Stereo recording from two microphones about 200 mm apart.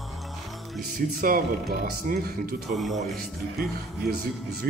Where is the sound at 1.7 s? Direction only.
50° right (ahead or behind).